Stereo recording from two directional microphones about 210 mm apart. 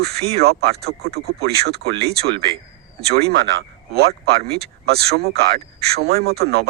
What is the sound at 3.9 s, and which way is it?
Speech, 50° right (ahead or behind).